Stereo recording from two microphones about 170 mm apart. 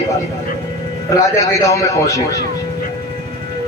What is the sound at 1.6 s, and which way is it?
Speech, 20° left (ahead or behind).